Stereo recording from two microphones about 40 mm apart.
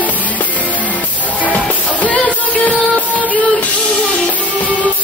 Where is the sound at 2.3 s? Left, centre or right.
Left.